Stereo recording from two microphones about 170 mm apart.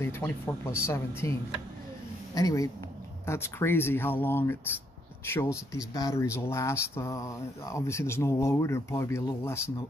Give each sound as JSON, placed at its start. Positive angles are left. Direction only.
{"t": 0.0, "sound": "speech", "side_deg": 15}
{"t": 2.3, "sound": "speech", "side_deg": 20}